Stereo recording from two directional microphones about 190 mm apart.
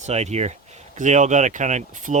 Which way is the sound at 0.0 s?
35° right (ahead or behind).